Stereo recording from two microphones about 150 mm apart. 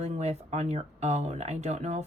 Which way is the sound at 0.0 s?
45° right (ahead or behind).